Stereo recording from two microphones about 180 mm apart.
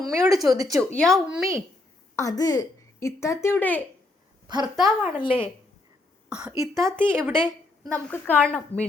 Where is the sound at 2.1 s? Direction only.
20° left (ahead or behind).